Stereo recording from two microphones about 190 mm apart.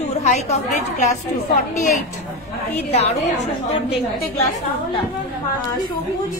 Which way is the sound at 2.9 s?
35° left (ahead or behind).